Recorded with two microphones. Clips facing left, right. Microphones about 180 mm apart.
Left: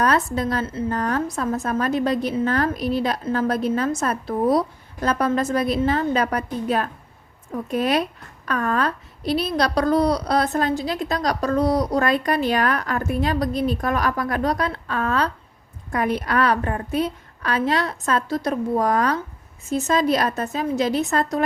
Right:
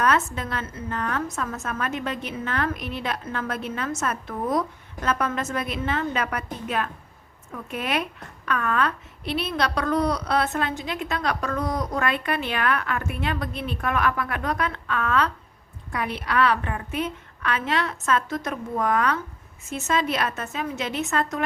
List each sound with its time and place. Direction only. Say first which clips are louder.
0.0 s a woman's voice: left 3 dB; 35° left (ahead or behind)